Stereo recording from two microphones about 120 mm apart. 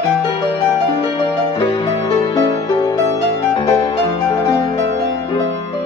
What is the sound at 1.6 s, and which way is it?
Music, 45° left (ahead or behind).